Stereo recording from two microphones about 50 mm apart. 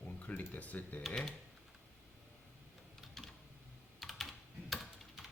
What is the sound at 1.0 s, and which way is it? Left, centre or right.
Speech, centre.